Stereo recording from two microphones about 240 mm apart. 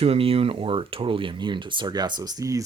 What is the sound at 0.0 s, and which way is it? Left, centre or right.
Speech, right.